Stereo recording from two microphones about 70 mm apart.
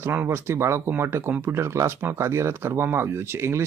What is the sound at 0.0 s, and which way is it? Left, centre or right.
Speech, right.